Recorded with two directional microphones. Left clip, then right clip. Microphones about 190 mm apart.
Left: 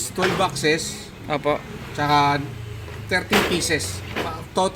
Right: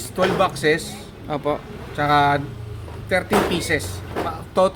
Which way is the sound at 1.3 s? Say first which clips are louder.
Left 1 dB; 10° right (ahead or behind).